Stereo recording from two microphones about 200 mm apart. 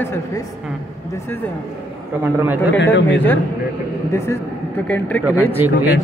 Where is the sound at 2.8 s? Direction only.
60° left (ahead or behind).